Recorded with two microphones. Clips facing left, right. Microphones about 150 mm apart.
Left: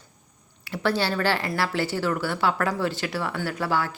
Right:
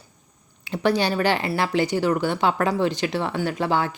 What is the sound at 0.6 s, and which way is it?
Speech, 20° right (ahead or behind).